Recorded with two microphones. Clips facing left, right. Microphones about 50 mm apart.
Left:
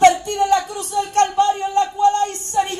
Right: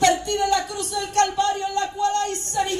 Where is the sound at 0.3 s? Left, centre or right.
Left.